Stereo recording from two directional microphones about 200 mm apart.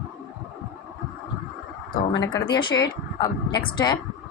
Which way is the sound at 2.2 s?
20° left (ahead or behind).